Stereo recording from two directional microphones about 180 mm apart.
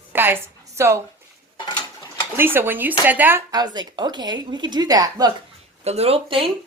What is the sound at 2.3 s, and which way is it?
Speech, 10° right (ahead or behind).